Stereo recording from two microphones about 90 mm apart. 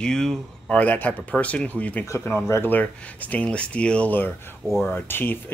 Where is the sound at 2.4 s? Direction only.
30° left (ahead or behind).